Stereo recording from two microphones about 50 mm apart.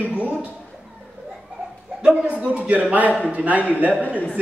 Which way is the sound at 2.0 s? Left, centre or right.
Right.